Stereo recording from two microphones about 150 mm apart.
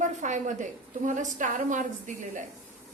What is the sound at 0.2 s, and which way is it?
A woman's voice, 55° right (ahead or behind).